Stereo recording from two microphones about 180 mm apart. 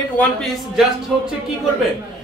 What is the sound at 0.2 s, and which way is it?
Speech, centre (ahead or behind).